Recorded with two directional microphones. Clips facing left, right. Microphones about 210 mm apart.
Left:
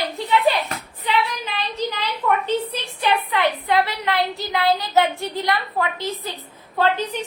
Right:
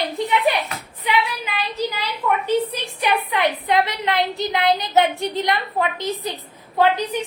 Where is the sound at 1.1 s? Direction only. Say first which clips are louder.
Right 1 dB; 10° right (ahead or behind).